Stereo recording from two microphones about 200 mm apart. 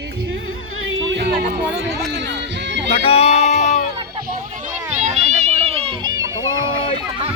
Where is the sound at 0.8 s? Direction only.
70° right (ahead or behind).